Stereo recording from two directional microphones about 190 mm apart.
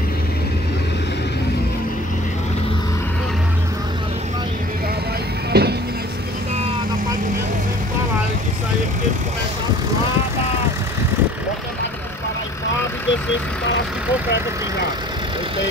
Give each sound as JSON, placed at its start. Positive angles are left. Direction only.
{"t": 5.5, "sound": "music", "side_deg": -55}